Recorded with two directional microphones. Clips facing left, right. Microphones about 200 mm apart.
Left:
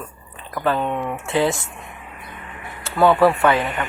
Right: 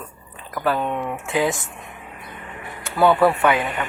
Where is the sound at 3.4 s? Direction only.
15° right (ahead or behind).